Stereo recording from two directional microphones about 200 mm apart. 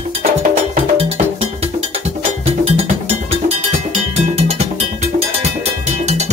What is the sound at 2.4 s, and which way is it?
Cowbell, 30° right (ahead or behind).